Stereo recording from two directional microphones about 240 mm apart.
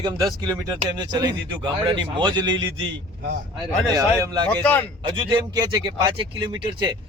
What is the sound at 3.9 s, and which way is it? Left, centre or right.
Speech, centre.